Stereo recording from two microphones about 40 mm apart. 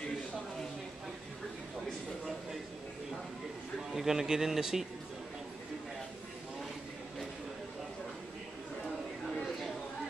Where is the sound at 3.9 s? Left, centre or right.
Centre.